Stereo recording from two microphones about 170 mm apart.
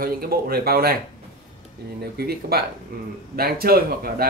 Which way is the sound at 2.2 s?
65° right (ahead or behind).